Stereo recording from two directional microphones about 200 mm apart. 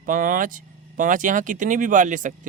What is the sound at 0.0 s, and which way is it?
Speech, 40° right (ahead or behind).